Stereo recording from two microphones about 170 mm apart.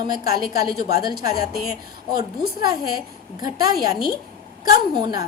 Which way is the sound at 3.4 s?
20° right (ahead or behind).